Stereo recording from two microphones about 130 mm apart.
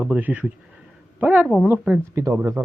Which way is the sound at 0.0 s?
15° right (ahead or behind).